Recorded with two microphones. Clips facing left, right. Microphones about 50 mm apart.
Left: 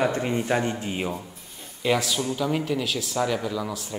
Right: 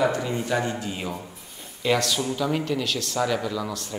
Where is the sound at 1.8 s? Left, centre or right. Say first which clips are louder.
Right 1 dB; centre.